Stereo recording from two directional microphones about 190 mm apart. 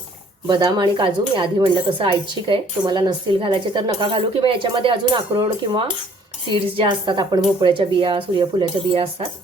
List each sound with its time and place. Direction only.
0.4 s speech: 25° right (ahead or behind)